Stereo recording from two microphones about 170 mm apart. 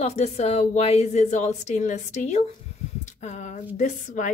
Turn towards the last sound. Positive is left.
turn(degrees=45)  # may be behind; listen again after turning